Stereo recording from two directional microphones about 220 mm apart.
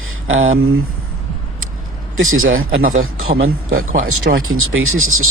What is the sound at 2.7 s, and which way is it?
Speech, 40° right (ahead or behind).